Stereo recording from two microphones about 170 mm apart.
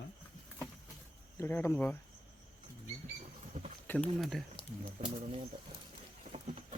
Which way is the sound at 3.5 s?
50° right (ahead or behind).